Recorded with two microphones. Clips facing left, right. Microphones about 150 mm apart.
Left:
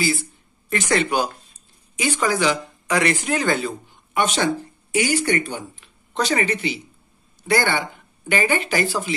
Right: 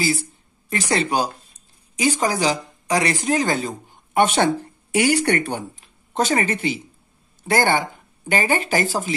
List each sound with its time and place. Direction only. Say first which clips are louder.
0.7 s a woman's voice: left 1 dB; 30° right (ahead or behind); by 5.7 s 65° right (ahead or behind)
5.8 s speech: right 1 dB; 45° right (ahead or behind)